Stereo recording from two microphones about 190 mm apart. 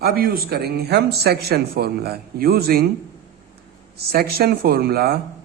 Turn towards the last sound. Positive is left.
turn(degrees=-55)  # may be behind; listen again after turning